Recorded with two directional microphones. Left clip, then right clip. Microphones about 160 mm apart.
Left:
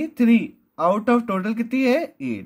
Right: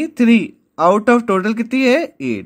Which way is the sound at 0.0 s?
25° right (ahead or behind).